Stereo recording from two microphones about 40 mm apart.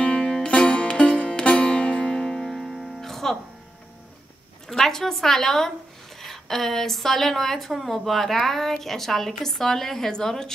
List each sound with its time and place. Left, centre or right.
0.0 s music: left; by 3.3 s centre
4.6 s a woman's voice: centre